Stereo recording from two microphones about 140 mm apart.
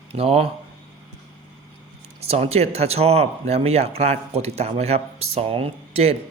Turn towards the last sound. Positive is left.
turn(degrees=-45)  # may be behind; listen again after turning